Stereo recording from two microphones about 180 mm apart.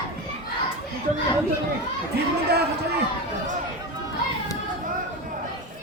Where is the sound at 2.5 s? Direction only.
65° right (ahead or behind).